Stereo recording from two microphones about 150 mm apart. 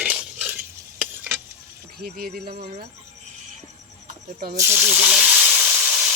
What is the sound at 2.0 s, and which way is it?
Speech, 85° right.